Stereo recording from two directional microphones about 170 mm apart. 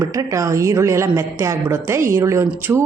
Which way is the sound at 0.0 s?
20° right (ahead or behind).